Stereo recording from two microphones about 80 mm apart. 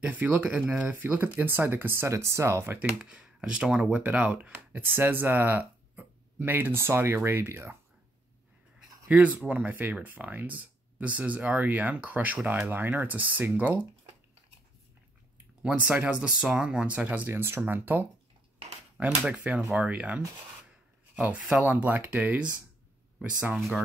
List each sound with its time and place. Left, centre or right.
0.0 s speech: right
2.8 s speech: centre
9.1 s speech: centre
15.6 s speech: centre
18.9 s speech: centre
21.2 s speech: centre